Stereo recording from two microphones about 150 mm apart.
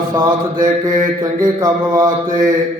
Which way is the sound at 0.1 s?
30° right (ahead or behind).